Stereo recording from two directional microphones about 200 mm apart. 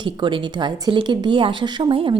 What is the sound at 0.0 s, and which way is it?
Speech, 25° right (ahead or behind).